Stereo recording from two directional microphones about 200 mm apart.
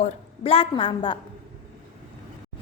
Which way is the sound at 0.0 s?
30° left (ahead or behind).